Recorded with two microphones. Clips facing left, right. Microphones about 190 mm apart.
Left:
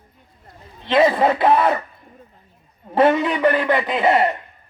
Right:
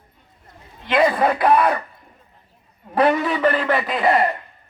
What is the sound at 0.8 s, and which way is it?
Speech, 25° left (ahead or behind).